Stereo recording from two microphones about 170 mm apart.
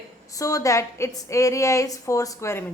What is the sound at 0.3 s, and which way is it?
A woman's voice, 20° left (ahead or behind).